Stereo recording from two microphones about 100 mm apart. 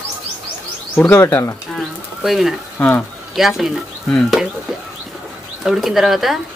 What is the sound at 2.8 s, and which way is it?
Speech, 15° left (ahead or behind).